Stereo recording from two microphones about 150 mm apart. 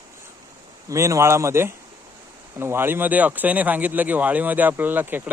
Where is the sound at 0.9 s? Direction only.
20° right (ahead or behind).